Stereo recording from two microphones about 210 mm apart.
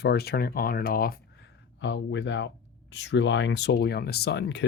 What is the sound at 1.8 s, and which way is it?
Speech, 60° left (ahead or behind).